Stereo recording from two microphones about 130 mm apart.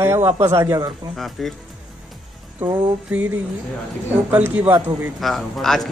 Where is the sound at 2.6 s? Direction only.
15° right (ahead or behind).